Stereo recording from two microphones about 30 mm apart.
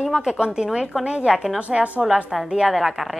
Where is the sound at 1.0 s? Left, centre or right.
Right.